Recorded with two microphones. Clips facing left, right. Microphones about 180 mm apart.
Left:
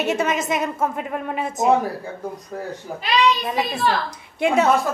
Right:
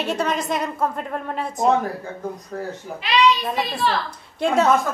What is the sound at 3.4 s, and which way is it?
Speech, 5° left (ahead or behind).